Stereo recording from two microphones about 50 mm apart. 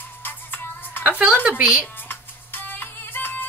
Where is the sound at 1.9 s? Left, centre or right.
Left.